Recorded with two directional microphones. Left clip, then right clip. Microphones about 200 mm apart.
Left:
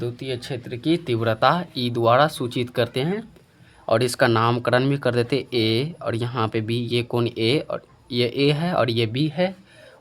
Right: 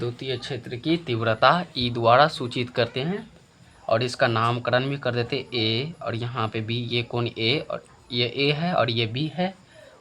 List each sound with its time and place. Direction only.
0.0 s speech: 35° left (ahead or behind)